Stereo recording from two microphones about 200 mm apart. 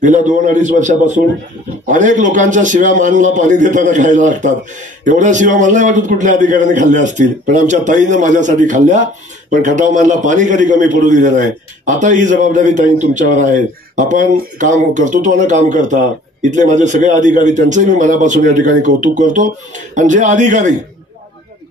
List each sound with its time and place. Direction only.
0.0 s a man's voice: 40° right (ahead or behind)